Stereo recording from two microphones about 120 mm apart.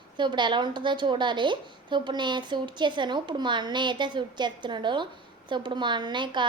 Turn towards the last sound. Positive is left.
turn(degrees=-40)  # may be behind; listen again after turning